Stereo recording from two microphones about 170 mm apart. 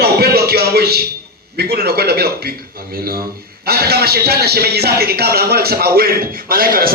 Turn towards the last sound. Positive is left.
turn(degrees=-60)  # may be behind; listen again after turning